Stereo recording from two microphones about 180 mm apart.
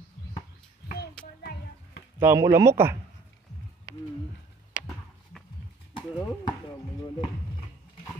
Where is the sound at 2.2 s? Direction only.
15° right (ahead or behind).